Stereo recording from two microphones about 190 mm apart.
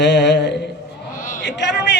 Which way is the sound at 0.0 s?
65° left (ahead or behind).